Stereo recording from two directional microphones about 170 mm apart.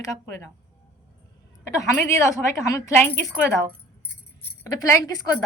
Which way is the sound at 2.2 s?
20° left (ahead or behind).